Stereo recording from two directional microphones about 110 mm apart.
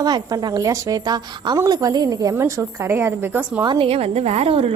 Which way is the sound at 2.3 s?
20° right (ahead or behind).